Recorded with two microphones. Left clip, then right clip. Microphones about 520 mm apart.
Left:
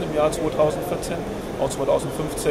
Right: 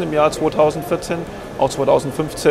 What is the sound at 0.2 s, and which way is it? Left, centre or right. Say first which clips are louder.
Speech: right 5 dB; right.